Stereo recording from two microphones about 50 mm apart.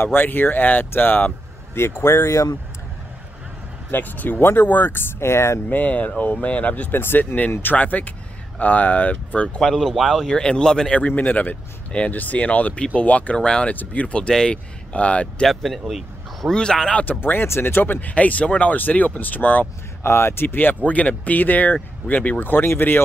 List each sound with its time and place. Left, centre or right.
0.0 s speech: left
1.8 s speech: left
3.9 s speech: left
5.2 s speech: left
5.7 s speech: left
7.0 s speech: left
9.6 s a man's voice: centre
10.3 s a man's voice: centre
10.9 s a man's voice: left
15.4 s a man's voice: centre
17.2 s speech: left
18.0 s speech: left
20.0 s speech: left
20.4 s speech: left